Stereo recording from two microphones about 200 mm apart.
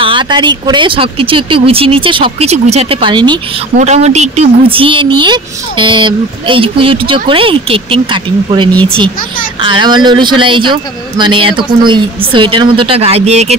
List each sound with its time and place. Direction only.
0.0 s a man's voice: 25° right (ahead or behind)
3.7 s a man's voice: 35° right (ahead or behind)